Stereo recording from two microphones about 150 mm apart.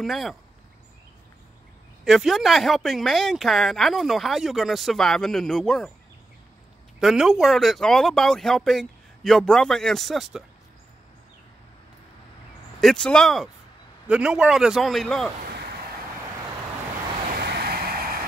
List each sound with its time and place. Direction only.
0.0 s speech: centre (ahead or behind)
2.0 s speech: centre (ahead or behind)
7.0 s speech: 5° right (ahead or behind)
12.8 s speech: 5° left (ahead or behind)
17.3 s vehicle: 90° right